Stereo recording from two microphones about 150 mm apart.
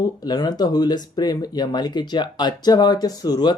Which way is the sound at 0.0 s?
25° left (ahead or behind).